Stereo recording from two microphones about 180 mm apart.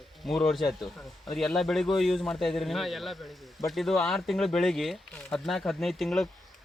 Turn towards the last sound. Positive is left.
turn(degrees=0)  # may be behind; listen again after turning